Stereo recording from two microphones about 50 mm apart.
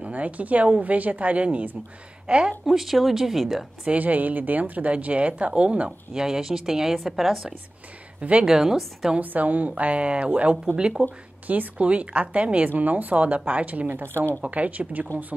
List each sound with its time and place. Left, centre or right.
0.0 s a woman's voice: right
2.6 s speech: centre
3.8 s speech: right; by 7.5 s centre
8.2 s speech: right
8.5 s a woman's voice: centre
9.2 s speech: right
11.0 s speech: centre
11.4 s a woman's voice: right
11.8 s speech: right
14.0 s speech: right
14.4 s a woman's voice: right